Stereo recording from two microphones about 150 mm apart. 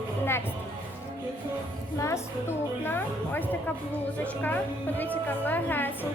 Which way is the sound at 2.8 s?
15° left (ahead or behind).